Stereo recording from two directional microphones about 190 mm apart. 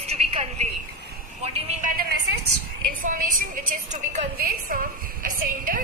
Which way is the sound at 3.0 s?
45° right (ahead or behind).